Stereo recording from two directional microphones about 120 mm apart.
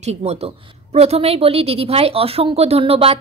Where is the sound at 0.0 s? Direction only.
65° right (ahead or behind).